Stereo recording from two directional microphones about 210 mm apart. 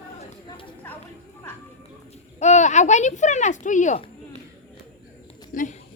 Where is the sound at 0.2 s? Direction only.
25° left (ahead or behind).